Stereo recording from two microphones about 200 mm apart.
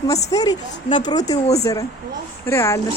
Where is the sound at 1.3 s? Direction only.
35° left (ahead or behind).